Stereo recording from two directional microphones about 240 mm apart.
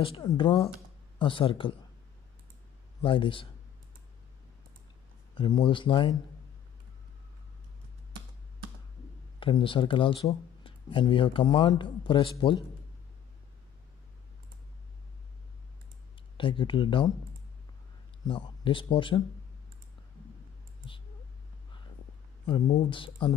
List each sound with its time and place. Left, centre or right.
0.0 s speech: left
3.0 s speech: left
5.3 s speech: centre
9.4 s speech: left
16.3 s speech: left
18.2 s speech: centre
22.5 s speech: left